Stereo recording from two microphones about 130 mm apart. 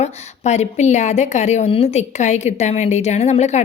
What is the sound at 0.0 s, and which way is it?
A woman's voice, 60° left (ahead or behind).